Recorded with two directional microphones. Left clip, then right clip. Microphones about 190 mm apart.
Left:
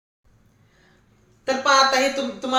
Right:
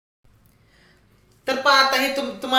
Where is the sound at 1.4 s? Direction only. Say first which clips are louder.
Even; 20° right (ahead or behind).